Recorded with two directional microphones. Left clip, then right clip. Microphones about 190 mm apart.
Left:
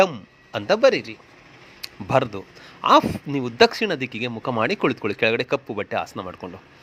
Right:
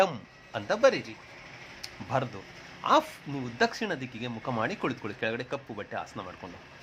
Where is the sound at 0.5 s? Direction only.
30° left (ahead or behind).